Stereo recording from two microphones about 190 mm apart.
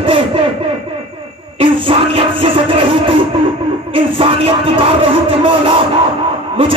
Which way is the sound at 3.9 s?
25° right (ahead or behind).